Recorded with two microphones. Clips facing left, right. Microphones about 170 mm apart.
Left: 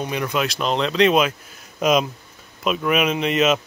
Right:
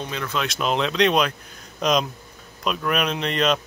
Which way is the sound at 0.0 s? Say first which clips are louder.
Left 4 dB; 15° left (ahead or behind).